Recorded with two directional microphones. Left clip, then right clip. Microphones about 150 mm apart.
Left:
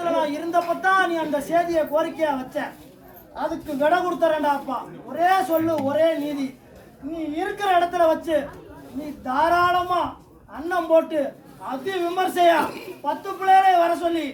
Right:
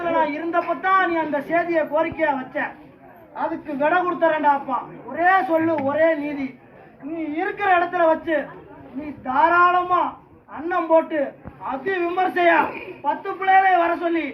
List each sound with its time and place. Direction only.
0.0 s a woman's voice: 35° left (ahead or behind)
7.3 s a woman's voice: 35° left (ahead or behind)